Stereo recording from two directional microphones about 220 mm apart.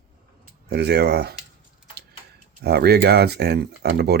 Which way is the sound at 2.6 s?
45° right (ahead or behind).